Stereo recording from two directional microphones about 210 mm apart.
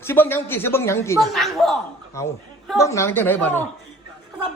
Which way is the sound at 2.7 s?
15° left (ahead or behind).